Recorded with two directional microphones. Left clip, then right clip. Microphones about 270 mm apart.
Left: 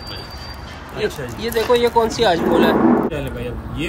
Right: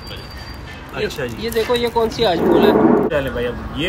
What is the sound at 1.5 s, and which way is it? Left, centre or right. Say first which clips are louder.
Speech: left 3 dB; centre.